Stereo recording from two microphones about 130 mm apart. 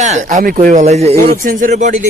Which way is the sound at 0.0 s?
65° right (ahead or behind).